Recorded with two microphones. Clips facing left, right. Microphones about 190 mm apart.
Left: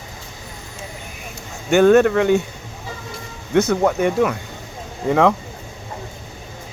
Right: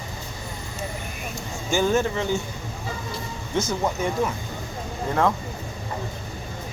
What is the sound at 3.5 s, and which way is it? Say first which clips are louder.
Speech: left 8 dB; 65° left (ahead or behind).